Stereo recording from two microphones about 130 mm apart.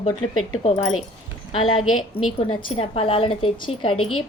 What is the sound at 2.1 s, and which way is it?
A woman's voice, 45° left (ahead or behind).